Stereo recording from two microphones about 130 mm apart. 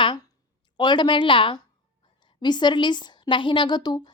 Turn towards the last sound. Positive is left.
turn(degrees=35)  # may be behind; listen again after turning